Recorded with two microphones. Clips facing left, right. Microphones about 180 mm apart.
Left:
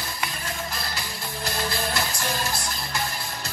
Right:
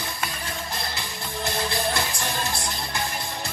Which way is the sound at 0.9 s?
20° right (ahead or behind).